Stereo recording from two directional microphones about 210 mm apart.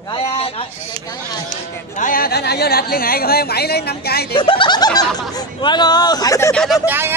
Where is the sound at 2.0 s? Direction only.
40° left (ahead or behind).